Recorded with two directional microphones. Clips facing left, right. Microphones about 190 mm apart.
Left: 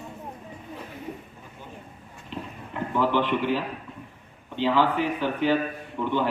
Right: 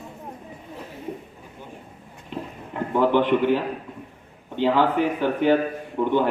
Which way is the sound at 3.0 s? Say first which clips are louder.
Right 5 dB; 50° right (ahead or behind).